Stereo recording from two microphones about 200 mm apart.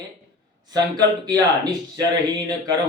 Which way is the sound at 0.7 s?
20° right (ahead or behind).